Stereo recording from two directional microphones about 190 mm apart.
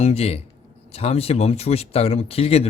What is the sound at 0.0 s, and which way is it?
Speech, 35° left (ahead or behind).